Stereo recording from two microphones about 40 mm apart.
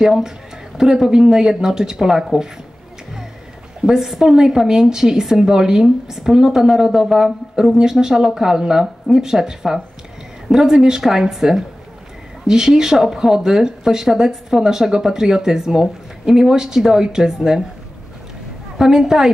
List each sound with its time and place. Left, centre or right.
0.0 s speech: centre
3.8 s speech: centre
18.8 s speech: centre